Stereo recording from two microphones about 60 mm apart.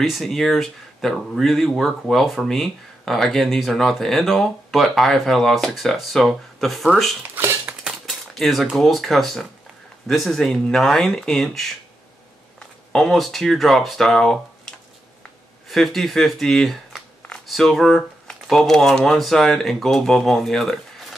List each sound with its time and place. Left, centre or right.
0.0 s speech: centre
7.2 s dishes: right
8.4 s speech: centre
15.7 s speech: centre